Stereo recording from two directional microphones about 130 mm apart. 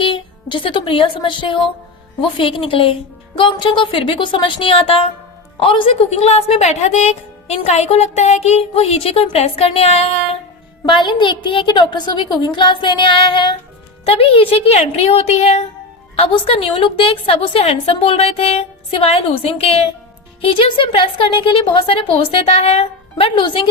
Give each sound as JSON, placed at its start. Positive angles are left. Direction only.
{"t": 0.0, "sound": "a woman's voice", "side_deg": 40}
{"t": 10.8, "sound": "a woman's voice", "side_deg": 40}